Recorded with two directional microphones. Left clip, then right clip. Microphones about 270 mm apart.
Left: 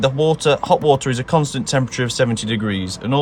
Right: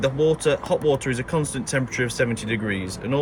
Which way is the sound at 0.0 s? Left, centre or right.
Centre.